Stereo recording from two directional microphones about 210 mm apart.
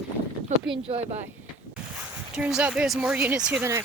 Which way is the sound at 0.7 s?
30° right (ahead or behind).